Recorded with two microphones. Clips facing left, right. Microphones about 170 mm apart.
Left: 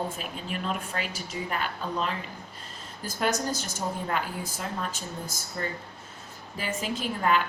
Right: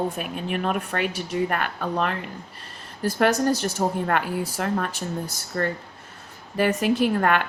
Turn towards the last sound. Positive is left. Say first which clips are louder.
# right 5 dB
turn(degrees=-65)  # may be behind; listen again after turning